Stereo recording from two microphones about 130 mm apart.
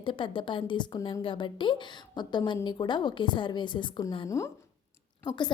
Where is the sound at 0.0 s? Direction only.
40° left (ahead or behind).